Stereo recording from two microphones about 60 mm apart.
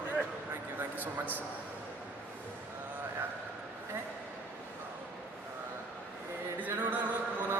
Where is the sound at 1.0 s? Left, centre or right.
Right.